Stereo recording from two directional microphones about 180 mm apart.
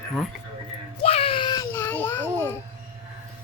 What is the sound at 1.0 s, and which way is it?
Baby cry, 30° left (ahead or behind).